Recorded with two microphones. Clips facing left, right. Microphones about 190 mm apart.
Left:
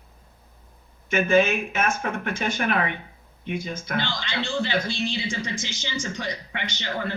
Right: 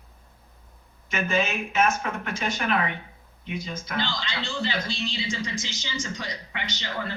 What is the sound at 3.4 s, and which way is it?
Speech, 55° left (ahead or behind).